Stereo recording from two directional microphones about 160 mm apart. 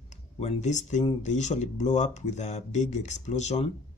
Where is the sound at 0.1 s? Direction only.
45° left (ahead or behind).